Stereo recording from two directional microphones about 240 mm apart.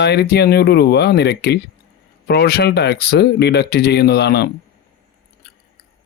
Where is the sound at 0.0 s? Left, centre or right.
Left.